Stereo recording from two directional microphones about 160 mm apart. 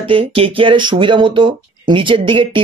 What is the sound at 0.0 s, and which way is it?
Speech, 35° right (ahead or behind).